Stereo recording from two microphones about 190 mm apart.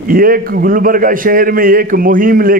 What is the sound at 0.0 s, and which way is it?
A man's voice, 50° right (ahead or behind).